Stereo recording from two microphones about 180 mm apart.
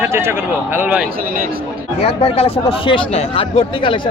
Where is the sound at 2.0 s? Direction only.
35° left (ahead or behind).